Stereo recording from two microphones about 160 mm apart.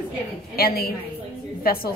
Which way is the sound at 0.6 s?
70° left (ahead or behind).